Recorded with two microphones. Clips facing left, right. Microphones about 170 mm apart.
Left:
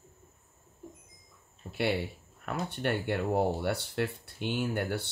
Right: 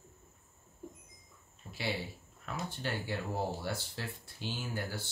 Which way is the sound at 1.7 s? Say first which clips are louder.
Left 7 dB; 65° left (ahead or behind).